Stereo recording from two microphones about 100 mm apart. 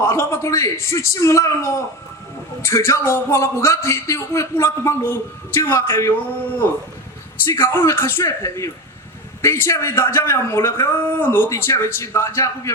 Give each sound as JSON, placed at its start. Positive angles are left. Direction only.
{"t": 0.0, "sound": "speech", "side_deg": 30}
{"t": 7.5, "sound": "speech", "side_deg": 25}